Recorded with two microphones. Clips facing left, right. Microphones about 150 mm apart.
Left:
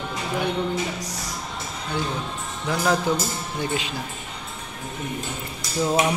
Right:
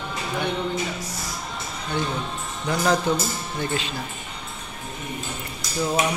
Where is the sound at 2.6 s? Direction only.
5° left (ahead or behind).